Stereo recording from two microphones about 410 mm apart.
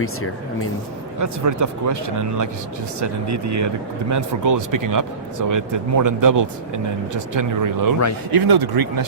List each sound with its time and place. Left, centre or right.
0.0 s speech: left
1.2 s speech: right
8.3 s speech: right